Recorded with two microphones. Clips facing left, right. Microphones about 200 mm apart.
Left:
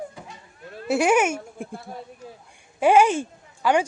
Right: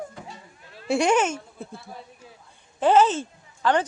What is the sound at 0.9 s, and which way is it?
Speech, 5° left (ahead or behind).